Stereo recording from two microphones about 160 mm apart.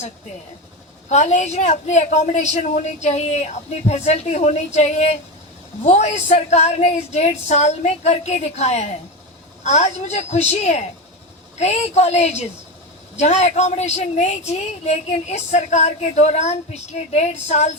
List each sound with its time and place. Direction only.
1.1 s a woman's voice: 45° left (ahead or behind)